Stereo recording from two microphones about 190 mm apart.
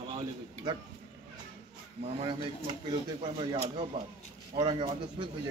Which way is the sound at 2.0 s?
35° right (ahead or behind).